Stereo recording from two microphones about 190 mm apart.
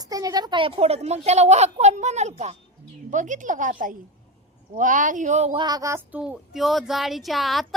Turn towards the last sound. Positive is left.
turn(degrees=0)  # may be behind; listen again after turning